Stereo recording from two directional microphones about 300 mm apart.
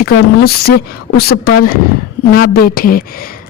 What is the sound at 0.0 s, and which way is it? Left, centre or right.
A man's voice, left.